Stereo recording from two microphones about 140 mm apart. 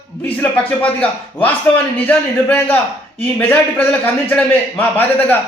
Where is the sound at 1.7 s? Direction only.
10° left (ahead or behind).